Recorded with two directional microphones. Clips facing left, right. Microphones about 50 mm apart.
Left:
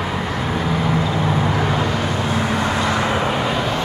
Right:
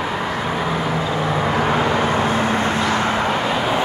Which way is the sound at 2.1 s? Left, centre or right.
Right.